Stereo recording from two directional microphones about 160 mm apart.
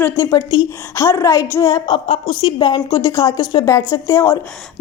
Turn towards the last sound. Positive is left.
turn(degrees=15)  # may be behind; listen again after turning